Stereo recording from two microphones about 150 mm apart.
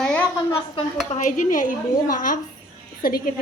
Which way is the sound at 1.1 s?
60° left (ahead or behind).